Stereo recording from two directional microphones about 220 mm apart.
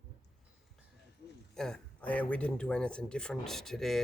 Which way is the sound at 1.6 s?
5° left (ahead or behind).